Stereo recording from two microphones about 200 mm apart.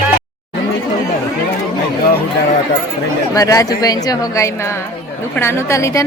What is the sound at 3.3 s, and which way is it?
A woman's voice, 15° left (ahead or behind).